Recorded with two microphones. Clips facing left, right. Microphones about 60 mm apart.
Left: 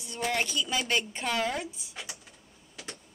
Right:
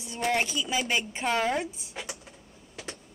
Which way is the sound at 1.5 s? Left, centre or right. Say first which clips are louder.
Right 5 dB; right.